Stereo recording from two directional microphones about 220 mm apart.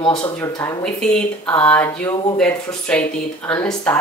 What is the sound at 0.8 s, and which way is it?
Speech, 5° left (ahead or behind).